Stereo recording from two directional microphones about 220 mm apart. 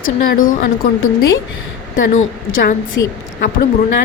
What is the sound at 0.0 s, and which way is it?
Speech, 40° left (ahead or behind).